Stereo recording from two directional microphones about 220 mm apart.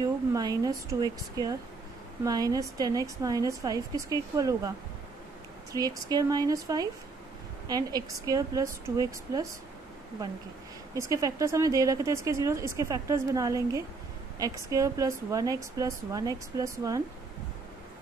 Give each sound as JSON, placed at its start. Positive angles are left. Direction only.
{"t": 0.3, "sound": "speech", "side_deg": -15}